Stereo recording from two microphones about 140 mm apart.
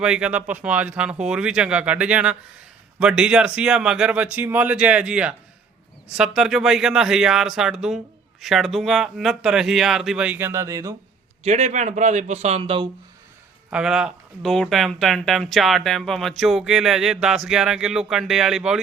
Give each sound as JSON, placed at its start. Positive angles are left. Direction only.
{"t": 0.0, "sound": "speech", "side_deg": -5}
{"t": 11.4, "sound": "a man's voice", "side_deg": -55}
{"t": 13.7, "sound": "speech", "side_deg": -5}